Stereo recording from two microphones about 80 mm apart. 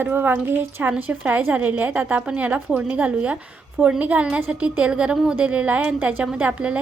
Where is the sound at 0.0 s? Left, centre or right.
Right.